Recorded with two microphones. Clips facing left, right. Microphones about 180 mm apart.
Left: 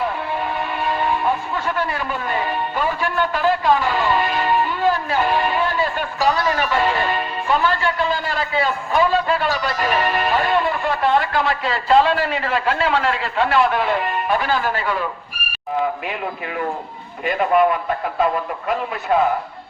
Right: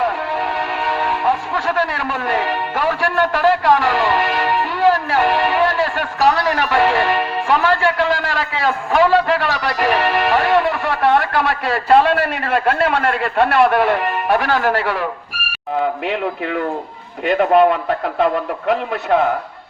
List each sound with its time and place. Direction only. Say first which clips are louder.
0.8 s speech: left 1 dB; 75° right (ahead or behind)
17.2 s a man's voice: right 4 dB; 75° right (ahead or behind)